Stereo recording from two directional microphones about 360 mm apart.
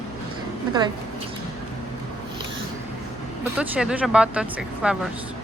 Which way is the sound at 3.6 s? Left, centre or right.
Centre.